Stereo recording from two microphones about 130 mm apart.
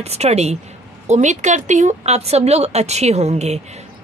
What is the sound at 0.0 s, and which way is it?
Speech, 55° right (ahead or behind).